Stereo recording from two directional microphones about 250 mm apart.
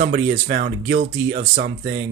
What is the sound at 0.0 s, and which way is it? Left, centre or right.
Speech, right.